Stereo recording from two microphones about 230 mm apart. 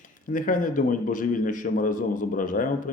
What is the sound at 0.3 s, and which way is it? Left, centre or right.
A man's voice, left.